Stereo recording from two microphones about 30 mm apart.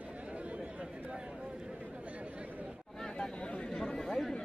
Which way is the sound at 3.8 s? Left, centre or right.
Left.